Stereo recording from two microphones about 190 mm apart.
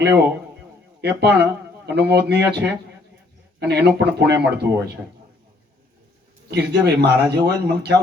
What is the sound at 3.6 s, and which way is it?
Speech, 60° right (ahead or behind).